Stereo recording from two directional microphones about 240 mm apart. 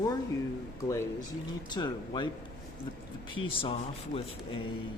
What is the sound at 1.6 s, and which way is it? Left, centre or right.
Speech, centre.